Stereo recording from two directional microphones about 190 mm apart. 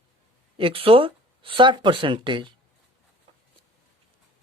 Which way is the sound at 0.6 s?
30° right (ahead or behind).